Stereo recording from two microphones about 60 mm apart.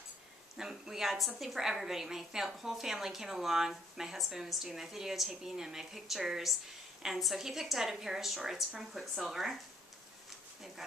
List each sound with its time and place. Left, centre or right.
0.6 s a woman's voice: centre